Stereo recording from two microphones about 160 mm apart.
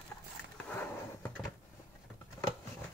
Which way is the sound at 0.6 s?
10° left (ahead or behind).